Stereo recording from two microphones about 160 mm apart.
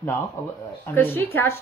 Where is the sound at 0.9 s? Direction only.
15° left (ahead or behind).